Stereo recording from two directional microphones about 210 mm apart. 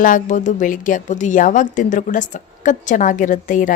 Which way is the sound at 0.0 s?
40° left (ahead or behind).